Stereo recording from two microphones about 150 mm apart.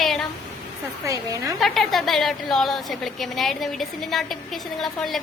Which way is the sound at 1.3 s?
20° right (ahead or behind).